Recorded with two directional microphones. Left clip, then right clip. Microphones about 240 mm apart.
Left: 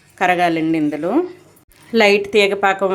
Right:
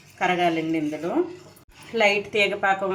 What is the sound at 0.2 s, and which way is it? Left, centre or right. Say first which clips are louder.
A woman's voice: left 7 dB; left.